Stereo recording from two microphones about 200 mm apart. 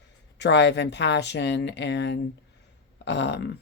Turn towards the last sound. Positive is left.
turn(degrees=60)  # may be behind; listen again after turning